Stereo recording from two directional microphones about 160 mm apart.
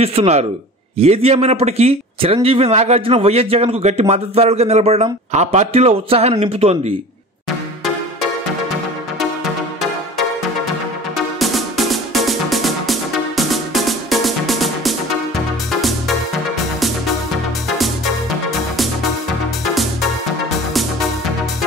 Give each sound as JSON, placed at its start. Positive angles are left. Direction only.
{"t": 0.0, "sound": "a man's voice", "side_deg": -40}
{"t": 11.1, "sound": "music", "side_deg": 0}
{"t": 17.7, "sound": "music", "side_deg": 0}
{"t": 19.6, "sound": "music", "side_deg": 0}